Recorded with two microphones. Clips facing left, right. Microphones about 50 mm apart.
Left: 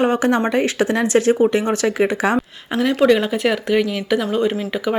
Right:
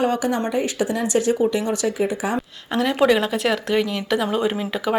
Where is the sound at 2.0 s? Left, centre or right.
Left.